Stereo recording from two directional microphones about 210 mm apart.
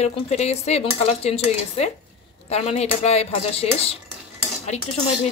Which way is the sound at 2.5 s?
30° left (ahead or behind).